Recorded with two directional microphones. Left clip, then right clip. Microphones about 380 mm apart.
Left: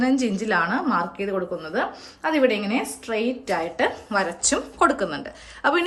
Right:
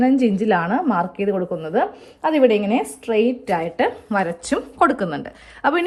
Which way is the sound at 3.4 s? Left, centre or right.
Centre.